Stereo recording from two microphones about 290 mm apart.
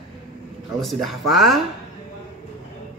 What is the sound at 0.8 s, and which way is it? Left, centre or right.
Speech, centre.